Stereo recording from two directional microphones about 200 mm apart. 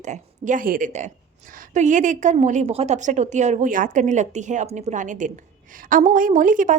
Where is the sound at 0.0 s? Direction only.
40° right (ahead or behind).